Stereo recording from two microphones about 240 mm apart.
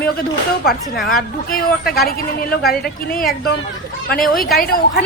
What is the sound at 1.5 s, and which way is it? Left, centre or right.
Speech, left.